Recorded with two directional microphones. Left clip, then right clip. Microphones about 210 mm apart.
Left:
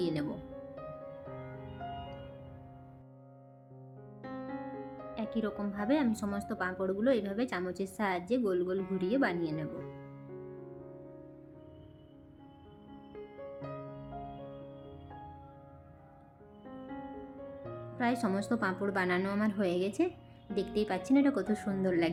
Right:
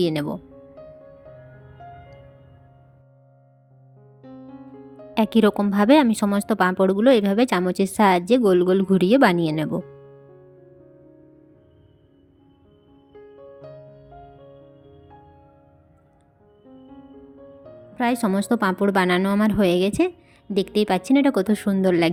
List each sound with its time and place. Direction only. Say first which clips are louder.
0.0 s speech: right 11 dB; 45° right (ahead or behind)
4.2 s music: left 1 dB; centre (ahead or behind)
5.1 s speech: right 18 dB; 55° right (ahead or behind)
17.9 s speech: right 10 dB; 40° right (ahead or behind)